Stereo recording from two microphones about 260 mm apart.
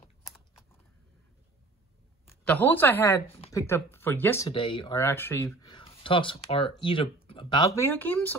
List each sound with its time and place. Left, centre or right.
2.4 s speech: centre